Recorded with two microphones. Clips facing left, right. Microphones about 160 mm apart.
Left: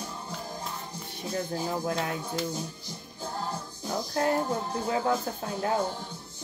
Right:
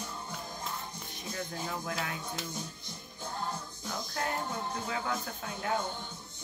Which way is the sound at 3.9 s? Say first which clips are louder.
Left 9 dB; 35° left (ahead or behind).